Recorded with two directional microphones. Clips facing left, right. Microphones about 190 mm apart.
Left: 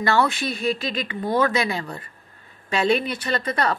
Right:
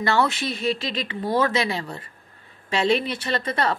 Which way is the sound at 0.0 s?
20° right (ahead or behind).